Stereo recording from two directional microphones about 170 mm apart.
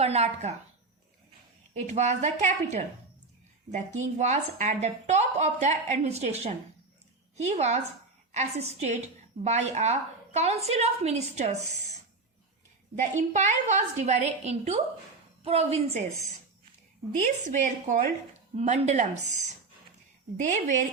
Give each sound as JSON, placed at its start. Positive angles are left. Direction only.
{"t": 0.0, "sound": "a woman's voice", "side_deg": -40}
{"t": 1.7, "sound": "a woman's voice", "side_deg": -40}
{"t": 13.0, "sound": "a woman's voice", "side_deg": -45}
{"t": 17.1, "sound": "a woman's voice", "side_deg": -45}
{"t": 20.3, "sound": "a woman's voice", "side_deg": -45}